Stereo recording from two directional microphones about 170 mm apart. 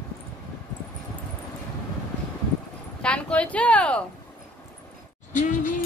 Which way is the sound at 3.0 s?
5° left (ahead or behind).